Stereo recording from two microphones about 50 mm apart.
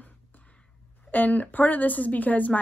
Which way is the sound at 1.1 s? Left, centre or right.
Left.